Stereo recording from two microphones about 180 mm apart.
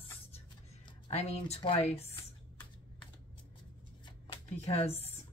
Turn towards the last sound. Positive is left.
turn(degrees=35)  # may be behind; listen again after turning